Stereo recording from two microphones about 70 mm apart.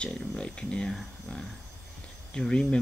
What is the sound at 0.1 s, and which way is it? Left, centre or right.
Speech, centre.